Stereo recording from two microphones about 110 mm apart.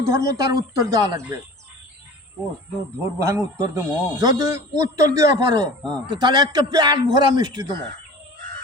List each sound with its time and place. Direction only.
0.0 s a man's voice: 30° right (ahead or behind)
3.0 s a man's voice: 30° right (ahead or behind)